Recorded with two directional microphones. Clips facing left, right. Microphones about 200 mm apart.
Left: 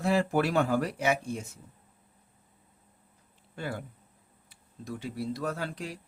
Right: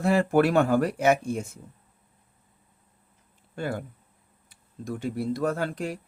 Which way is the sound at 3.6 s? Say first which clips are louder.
Right 5 dB; 50° right (ahead or behind).